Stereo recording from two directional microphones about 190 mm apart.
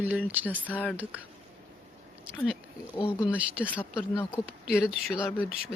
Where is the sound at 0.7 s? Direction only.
10° left (ahead or behind).